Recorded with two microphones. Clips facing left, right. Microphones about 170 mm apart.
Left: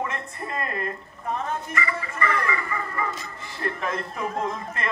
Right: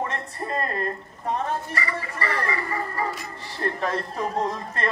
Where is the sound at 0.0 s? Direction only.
35° right (ahead or behind).